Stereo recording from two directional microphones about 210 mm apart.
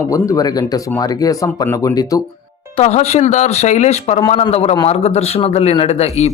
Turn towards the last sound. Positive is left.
turn(degrees=30)  # may be behind; listen again after turning